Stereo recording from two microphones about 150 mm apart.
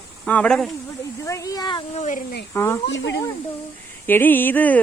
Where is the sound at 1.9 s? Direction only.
55° left (ahead or behind).